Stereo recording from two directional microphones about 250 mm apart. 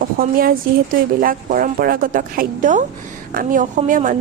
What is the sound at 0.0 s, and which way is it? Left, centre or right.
Speech, right.